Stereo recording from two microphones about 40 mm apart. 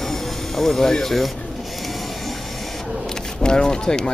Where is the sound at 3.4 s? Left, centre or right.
Left.